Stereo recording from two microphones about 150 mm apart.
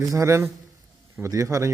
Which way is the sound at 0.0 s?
20° right (ahead or behind).